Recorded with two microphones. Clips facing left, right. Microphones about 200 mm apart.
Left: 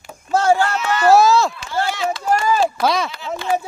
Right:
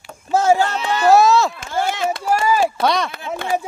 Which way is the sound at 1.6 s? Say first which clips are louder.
Right 1 dB; 50° right (ahead or behind).